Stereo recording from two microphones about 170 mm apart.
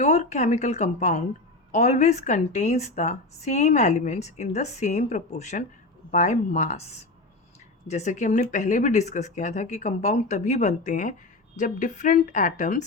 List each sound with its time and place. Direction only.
0.0 s a woman's voice: 40° left (ahead or behind)